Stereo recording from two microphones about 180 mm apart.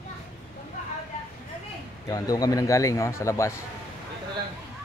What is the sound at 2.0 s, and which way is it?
A man's voice, 20° left (ahead or behind).